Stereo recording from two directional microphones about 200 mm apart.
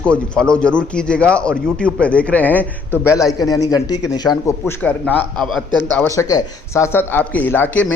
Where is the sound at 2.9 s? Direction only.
5° right (ahead or behind).